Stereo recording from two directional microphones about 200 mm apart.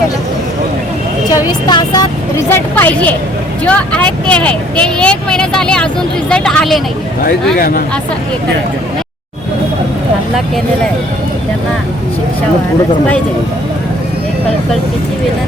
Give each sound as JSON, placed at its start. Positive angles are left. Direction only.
{"t": 1.3, "sound": "speech", "side_deg": 20}
{"t": 2.5, "sound": "speech", "side_deg": 10}
{"t": 7.3, "sound": "speech", "side_deg": 50}